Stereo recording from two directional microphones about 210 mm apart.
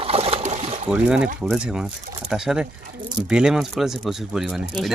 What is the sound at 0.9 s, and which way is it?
Speech, 5° right (ahead or behind).